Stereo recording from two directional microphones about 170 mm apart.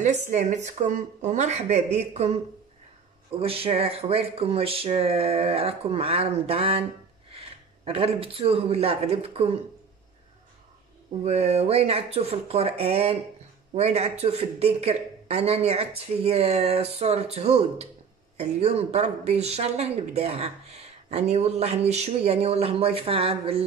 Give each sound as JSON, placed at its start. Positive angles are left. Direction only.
{"t": 0.0, "sound": "speech", "side_deg": -45}
{"t": 3.3, "sound": "speech", "side_deg": -35}
{"t": 11.2, "sound": "speech", "side_deg": -40}